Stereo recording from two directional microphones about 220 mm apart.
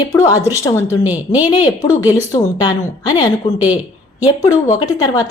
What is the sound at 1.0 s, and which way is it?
Speech, 10° right (ahead or behind).